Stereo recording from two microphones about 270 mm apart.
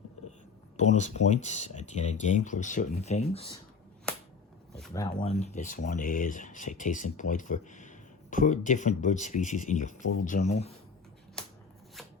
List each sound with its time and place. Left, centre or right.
0.8 s speech: left
5.1 s speech: left
11.4 s shuffling cards: centre